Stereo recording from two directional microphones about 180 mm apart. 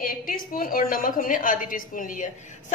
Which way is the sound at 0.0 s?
50° left (ahead or behind).